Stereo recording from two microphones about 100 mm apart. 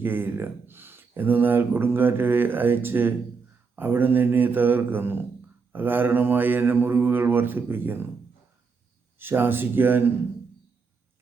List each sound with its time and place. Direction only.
0.0 s speech: 20° right (ahead or behind)
9.1 s speech: 20° right (ahead or behind)